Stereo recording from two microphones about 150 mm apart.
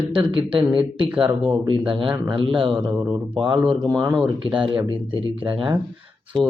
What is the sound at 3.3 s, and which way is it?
Speech, 35° right (ahead or behind).